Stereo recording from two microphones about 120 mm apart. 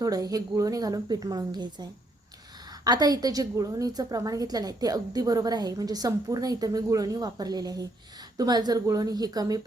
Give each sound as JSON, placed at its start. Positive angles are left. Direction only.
{"t": 0.0, "sound": "a woman's voice", "side_deg": -30}